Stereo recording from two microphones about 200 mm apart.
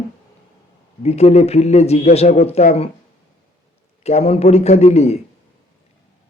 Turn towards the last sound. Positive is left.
turn(degrees=35)  # may be behind; listen again after turning